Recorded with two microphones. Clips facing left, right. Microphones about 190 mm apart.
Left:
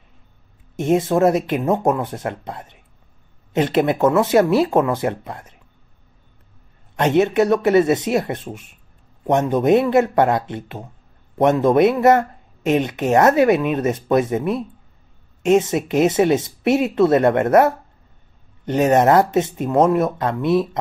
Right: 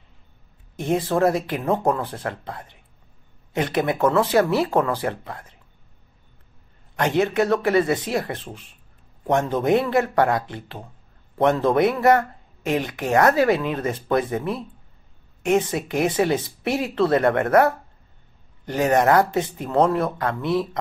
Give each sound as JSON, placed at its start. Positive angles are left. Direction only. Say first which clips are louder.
{"t": 0.7, "sound": "speech", "louder": "left 4 dB", "side_deg": 20}
{"t": 7.0, "sound": "speech", "louder": "left 4 dB", "side_deg": 20}